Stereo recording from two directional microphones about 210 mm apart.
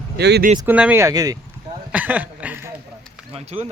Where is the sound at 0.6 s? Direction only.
5° right (ahead or behind).